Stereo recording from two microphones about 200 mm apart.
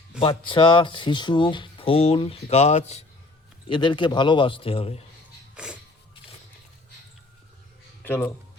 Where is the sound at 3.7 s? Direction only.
25° left (ahead or behind).